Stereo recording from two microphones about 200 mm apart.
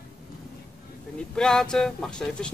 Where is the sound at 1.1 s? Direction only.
5° left (ahead or behind).